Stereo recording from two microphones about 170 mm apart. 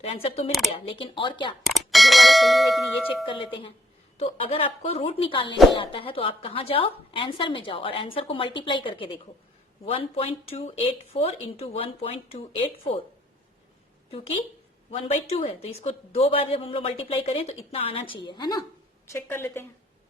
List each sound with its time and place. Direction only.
0.0 s a woman's voice: 35° left (ahead or behind)
1.6 s speech: centre (ahead or behind)
3.2 s a woman's voice: 30° left (ahead or behind)
14.8 s a woman's voice: 35° left (ahead or behind); by 19.6 s 15° left (ahead or behind)